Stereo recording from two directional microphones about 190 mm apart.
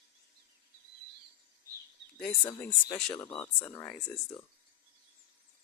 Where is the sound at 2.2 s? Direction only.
5° left (ahead or behind).